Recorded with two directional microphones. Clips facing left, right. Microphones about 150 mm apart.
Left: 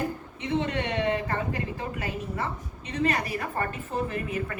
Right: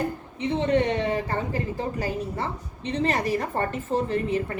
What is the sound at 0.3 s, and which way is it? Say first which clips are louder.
A woman's voice: right 6 dB; 30° right (ahead or behind).